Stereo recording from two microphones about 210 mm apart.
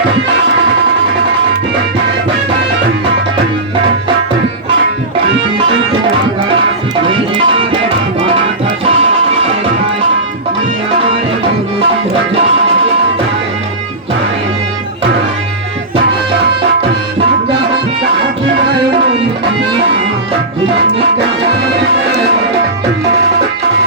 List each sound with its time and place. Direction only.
7.1 s music: 25° right (ahead or behind)